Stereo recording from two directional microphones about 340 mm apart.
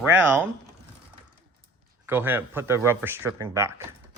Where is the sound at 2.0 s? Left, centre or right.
Centre.